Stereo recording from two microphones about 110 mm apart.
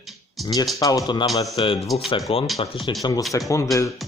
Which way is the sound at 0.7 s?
35° left (ahead or behind).